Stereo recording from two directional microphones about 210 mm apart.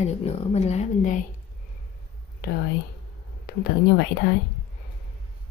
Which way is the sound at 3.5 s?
50° left (ahead or behind).